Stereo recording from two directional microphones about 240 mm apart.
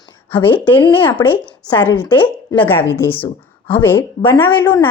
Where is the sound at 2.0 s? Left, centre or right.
Centre.